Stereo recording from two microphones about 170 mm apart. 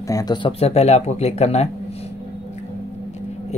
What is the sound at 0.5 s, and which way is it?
Speech, 40° left (ahead or behind).